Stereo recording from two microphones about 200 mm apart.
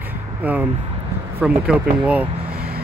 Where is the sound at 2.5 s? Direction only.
50° right (ahead or behind).